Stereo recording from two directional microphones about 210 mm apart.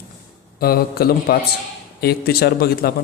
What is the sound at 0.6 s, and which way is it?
A man's voice, 45° left (ahead or behind).